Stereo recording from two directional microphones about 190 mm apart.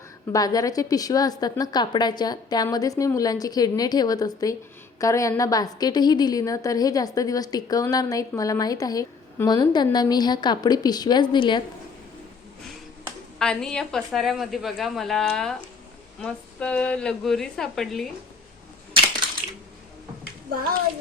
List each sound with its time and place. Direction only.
0.3 s a woman's voice: 20° left (ahead or behind)
13.4 s a woman's voice: 5° left (ahead or behind)